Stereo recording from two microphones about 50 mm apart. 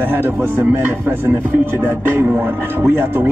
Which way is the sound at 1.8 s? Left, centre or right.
Right.